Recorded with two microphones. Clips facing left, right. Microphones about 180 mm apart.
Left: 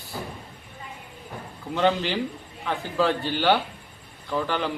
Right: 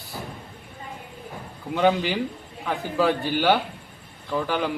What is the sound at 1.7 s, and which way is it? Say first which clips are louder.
Speech: right 2 dB; 10° right (ahead or behind).